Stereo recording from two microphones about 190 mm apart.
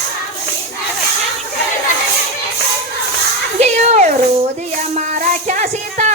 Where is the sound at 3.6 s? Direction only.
35° right (ahead or behind).